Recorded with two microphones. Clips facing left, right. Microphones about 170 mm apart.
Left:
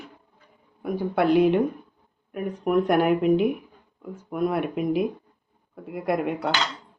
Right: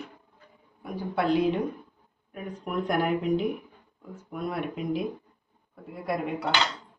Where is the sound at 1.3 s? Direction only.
60° left (ahead or behind).